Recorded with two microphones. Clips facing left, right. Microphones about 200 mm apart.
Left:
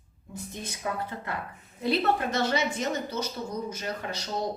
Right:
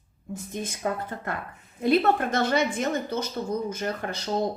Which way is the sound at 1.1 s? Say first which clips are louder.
Right 2 dB; 50° right (ahead or behind).